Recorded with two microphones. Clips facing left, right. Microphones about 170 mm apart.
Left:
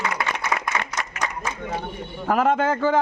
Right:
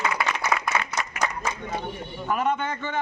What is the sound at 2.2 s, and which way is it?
Speech, 90° left.